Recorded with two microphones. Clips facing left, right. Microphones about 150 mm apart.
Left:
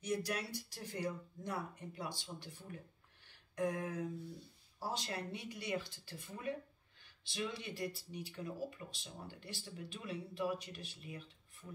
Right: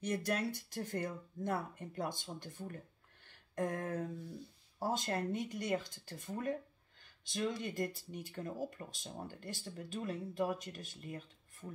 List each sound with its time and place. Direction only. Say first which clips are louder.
0.0 s speech: right 3 dB; 55° right (ahead or behind)